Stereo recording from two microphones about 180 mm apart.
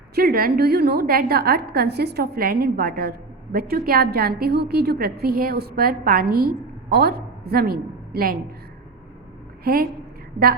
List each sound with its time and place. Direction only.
0.2 s a woman's voice: 55° right (ahead or behind)